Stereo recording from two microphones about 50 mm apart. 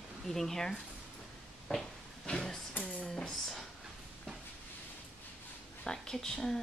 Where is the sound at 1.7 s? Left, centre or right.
Centre.